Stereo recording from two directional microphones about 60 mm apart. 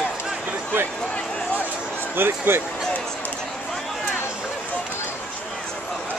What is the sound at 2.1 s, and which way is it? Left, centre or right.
Speech, right.